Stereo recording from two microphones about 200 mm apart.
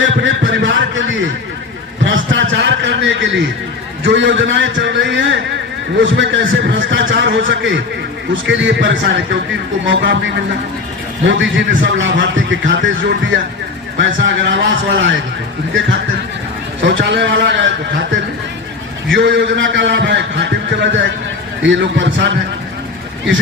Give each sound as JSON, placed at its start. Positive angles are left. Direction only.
{"t": 0.0, "sound": "a sound", "side_deg": -70}
{"t": 2.0, "sound": "a man's voice", "side_deg": -70}
{"t": 16.8, "sound": "a man's voice", "side_deg": -60}
{"t": 19.0, "sound": "a man's voice", "side_deg": -65}